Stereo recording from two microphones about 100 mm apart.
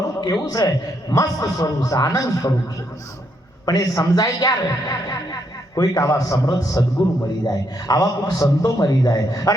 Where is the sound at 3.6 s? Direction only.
40° left (ahead or behind).